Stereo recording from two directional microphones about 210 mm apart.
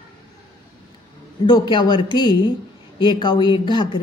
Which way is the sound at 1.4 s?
20° left (ahead or behind).